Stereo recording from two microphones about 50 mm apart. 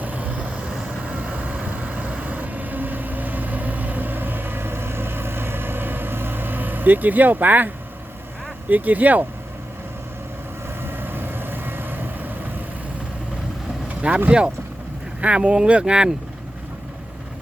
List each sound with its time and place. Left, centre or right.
0.0 s vehicle: right
8.7 s speech: right
10.8 s vehicle: right
14.3 s speech: centre